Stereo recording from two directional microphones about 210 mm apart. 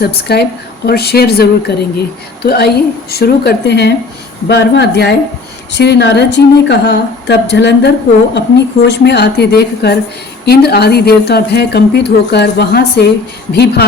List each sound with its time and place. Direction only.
0.0 s a woman's voice: 50° left (ahead or behind)